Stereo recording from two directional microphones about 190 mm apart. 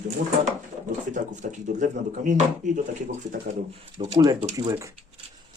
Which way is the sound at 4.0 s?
25° right (ahead or behind).